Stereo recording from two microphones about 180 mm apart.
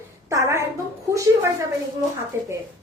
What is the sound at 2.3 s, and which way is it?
Speech, 15° right (ahead or behind).